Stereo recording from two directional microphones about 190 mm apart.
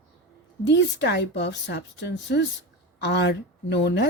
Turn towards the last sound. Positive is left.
turn(degrees=65)  # may be behind; listen again after turning